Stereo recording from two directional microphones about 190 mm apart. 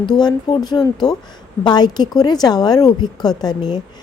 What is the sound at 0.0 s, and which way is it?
Speech, 20° left (ahead or behind).